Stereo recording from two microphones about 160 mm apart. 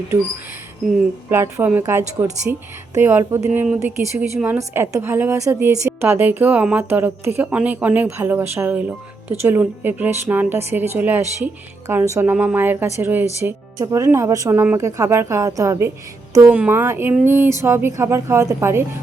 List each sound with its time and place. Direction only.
1.3 s speech: 15° right (ahead or behind)